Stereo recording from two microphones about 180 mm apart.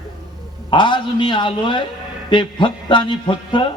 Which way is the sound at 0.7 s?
25° left (ahead or behind).